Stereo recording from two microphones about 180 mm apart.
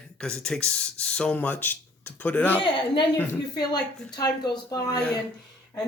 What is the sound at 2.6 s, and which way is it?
A woman's voice, 25° left (ahead or behind).